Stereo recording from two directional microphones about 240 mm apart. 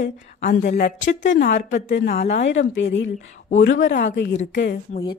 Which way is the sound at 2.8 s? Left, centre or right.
Left.